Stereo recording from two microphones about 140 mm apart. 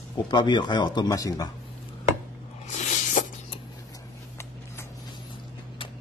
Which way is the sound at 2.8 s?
55° left (ahead or behind).